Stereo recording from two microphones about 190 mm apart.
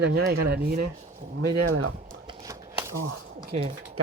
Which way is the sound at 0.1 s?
55° right (ahead or behind).